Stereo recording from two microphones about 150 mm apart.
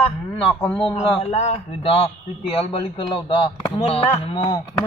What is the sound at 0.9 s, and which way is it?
A man's voice, 45° left (ahead or behind).